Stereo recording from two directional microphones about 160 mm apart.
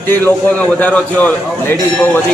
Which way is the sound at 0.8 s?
10° left (ahead or behind).